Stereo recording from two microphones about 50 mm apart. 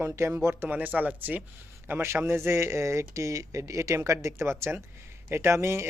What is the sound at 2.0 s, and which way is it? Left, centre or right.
Speech, right.